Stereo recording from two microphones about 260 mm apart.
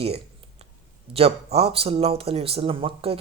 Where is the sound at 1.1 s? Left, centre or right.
Right.